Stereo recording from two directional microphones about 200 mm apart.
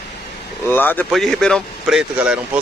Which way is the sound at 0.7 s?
10° left (ahead or behind).